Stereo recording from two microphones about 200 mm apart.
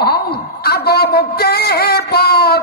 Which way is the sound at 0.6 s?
50° left (ahead or behind).